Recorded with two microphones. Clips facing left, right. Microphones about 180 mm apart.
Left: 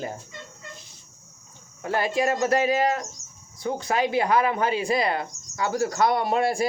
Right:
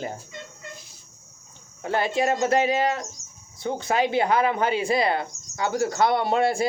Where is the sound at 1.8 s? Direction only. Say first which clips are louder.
Right 1 dB; 25° right (ahead or behind).